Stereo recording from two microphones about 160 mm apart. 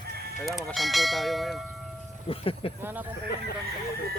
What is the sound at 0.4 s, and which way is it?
Speech, centre (ahead or behind).